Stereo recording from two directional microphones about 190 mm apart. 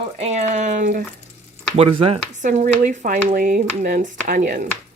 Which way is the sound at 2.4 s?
40° right (ahead or behind).